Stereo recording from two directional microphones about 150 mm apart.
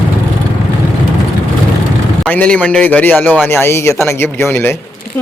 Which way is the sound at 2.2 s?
10° left (ahead or behind).